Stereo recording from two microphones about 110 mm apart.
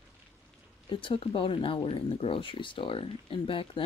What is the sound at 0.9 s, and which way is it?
Speech, 50° left (ahead or behind).